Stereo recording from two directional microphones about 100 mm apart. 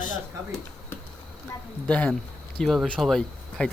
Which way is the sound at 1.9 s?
10° left (ahead or behind).